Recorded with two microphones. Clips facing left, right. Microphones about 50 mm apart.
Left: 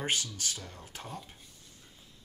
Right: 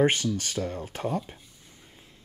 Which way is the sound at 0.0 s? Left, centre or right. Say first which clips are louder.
Right 10 dB; right.